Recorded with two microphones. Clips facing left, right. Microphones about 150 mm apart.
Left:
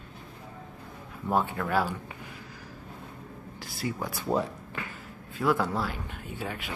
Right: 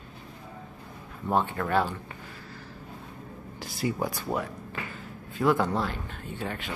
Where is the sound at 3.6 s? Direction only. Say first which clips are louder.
Right 4 dB; 20° right (ahead or behind).